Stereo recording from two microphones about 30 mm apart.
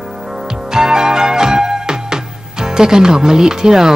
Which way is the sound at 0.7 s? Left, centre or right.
Right.